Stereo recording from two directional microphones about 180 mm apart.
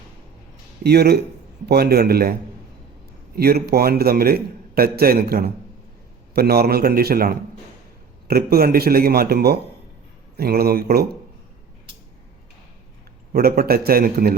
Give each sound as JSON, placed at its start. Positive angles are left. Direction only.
{"t": 0.9, "sound": "a man's voice", "side_deg": -65}
{"t": 3.3, "sound": "a man's voice", "side_deg": -60}
{"t": 13.3, "sound": "a man's voice", "side_deg": -60}